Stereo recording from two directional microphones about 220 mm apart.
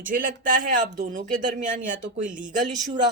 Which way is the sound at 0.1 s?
40° right (ahead or behind).